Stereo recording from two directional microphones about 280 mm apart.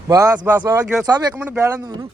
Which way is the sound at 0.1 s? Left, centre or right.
Centre.